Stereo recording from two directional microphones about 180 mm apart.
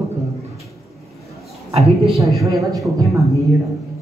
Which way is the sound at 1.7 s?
35° right (ahead or behind).